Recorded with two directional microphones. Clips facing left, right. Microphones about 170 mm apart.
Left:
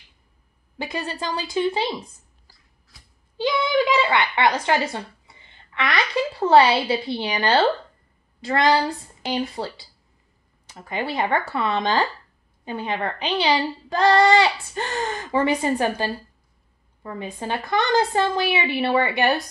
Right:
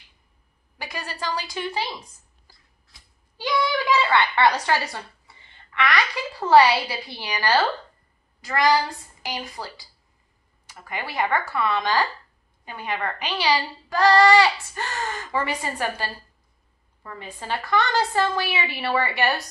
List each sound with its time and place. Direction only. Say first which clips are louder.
0.7 s speech: left 5 dB; 25° left (ahead or behind)
3.3 s speech: left 4 dB; 25° left (ahead or behind)
5.8 s speech: left 1 dB; 20° left (ahead or behind)